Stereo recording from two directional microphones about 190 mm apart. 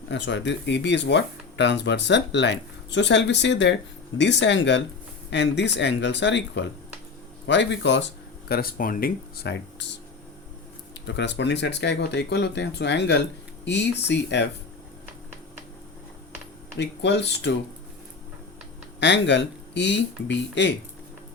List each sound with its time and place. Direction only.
0.1 s speech: 65° left (ahead or behind)
8.4 s speech: 55° left (ahead or behind)
11.0 s speech: 65° left (ahead or behind)
16.7 s speech: 65° left (ahead or behind)
18.9 s speech: 70° left (ahead or behind)